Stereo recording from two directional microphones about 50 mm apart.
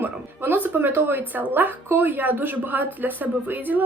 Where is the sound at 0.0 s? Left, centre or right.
Right.